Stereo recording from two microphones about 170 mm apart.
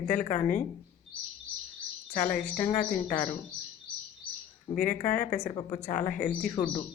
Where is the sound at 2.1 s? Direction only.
50° left (ahead or behind).